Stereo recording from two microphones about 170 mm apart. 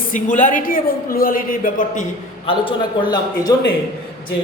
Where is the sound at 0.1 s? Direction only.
50° left (ahead or behind).